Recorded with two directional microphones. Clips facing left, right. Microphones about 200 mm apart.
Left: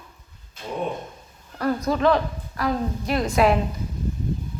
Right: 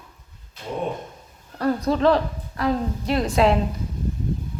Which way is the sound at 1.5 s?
25° right (ahead or behind).